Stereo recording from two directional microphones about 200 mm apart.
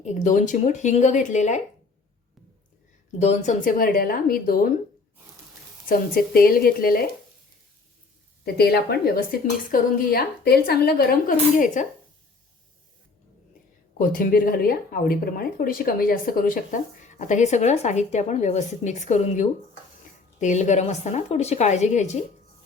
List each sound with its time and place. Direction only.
0.0 s speech: 40° left (ahead or behind)
3.2 s speech: 35° left (ahead or behind)
5.9 s speech: 45° left (ahead or behind)
8.5 s speech: 50° left (ahead or behind)
14.0 s speech: 45° left (ahead or behind)